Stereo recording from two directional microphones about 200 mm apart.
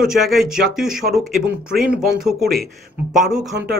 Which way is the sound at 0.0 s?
Centre (ahead or behind).